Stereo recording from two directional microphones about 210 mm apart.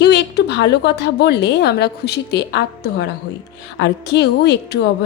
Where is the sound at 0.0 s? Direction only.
55° left (ahead or behind).